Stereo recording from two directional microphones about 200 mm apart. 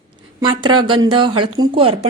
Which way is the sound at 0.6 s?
25° right (ahead or behind).